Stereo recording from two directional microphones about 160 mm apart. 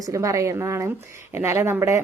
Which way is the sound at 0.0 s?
20° right (ahead or behind).